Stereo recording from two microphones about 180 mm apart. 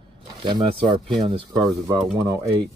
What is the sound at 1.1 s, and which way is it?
Speech, 25° right (ahead or behind).